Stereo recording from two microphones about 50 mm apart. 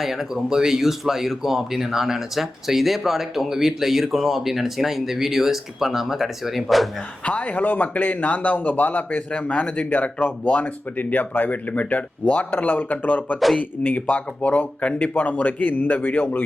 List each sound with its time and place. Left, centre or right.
0.0 s speech: centre
7.3 s a man's voice: left